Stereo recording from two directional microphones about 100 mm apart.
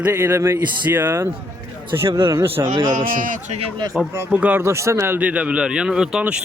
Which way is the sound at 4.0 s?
10° right (ahead or behind).